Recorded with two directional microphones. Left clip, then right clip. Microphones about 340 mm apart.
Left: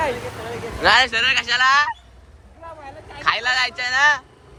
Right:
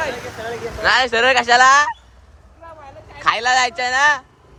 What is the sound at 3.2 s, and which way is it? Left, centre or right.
A man's voice, centre.